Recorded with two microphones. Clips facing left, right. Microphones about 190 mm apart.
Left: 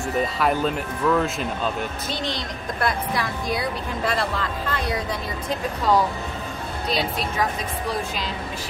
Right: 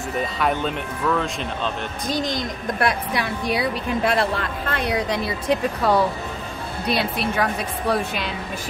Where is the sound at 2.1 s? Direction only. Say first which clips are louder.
Right 6 dB; 45° right (ahead or behind).